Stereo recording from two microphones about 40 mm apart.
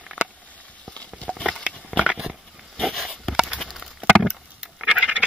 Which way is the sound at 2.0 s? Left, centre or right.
Right.